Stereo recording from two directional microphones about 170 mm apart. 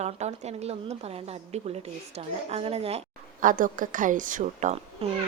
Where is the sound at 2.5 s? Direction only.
35° right (ahead or behind).